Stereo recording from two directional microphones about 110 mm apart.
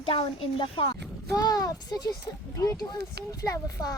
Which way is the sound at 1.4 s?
35° left (ahead or behind).